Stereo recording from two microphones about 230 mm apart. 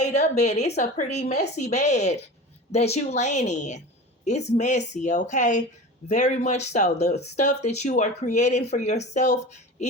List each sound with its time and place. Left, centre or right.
0.0 s a woman's voice: left